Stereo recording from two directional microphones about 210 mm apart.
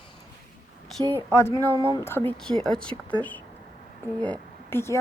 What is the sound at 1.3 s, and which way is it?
Speech, 15° left (ahead or behind).